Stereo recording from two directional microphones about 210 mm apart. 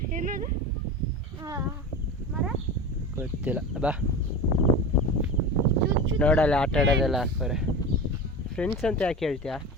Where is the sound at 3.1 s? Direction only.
5° right (ahead or behind).